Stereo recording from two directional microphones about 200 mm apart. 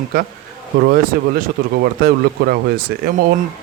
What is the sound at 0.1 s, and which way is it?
Speech, 50° right (ahead or behind).